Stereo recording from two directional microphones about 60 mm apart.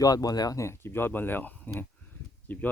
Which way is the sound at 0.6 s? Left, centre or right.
Left.